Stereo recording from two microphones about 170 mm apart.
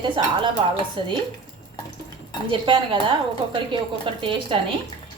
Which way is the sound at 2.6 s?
30° right (ahead or behind).